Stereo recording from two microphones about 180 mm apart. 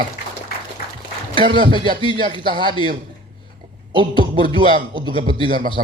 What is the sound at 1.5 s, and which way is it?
Speech, 25° right (ahead or behind).